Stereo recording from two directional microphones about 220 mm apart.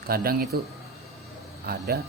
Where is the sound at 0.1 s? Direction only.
45° right (ahead or behind).